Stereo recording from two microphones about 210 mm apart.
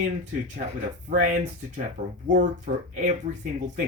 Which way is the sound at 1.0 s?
35° right (ahead or behind).